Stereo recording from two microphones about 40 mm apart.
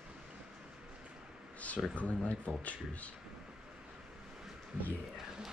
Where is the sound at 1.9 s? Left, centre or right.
Left.